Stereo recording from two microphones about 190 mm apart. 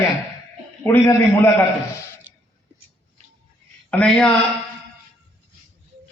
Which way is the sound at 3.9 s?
5° left (ahead or behind).